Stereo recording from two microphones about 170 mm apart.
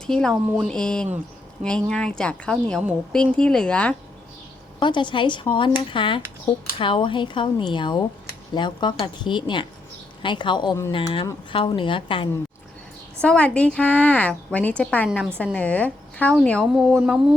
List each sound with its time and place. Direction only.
0.1 s speech: 5° left (ahead or behind)
4.8 s speech: 25° left (ahead or behind)
13.2 s a woman's voice: 5° left (ahead or behind)